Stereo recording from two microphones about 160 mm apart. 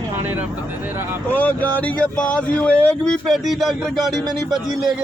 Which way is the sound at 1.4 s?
10° left (ahead or behind).